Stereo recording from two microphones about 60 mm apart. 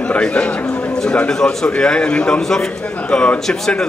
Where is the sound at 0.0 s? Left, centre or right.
Centre.